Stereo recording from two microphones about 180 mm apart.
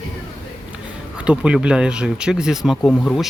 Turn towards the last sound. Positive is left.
turn(degrees=5)  # may be behind; listen again after turning